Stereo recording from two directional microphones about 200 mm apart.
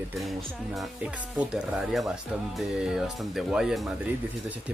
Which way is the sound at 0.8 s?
5° right (ahead or behind).